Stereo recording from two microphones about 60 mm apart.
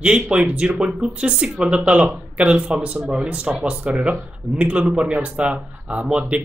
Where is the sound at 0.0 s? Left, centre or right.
Centre.